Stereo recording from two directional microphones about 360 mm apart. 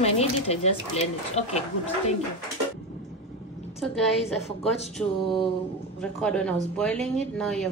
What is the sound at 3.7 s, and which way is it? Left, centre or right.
Speech, centre.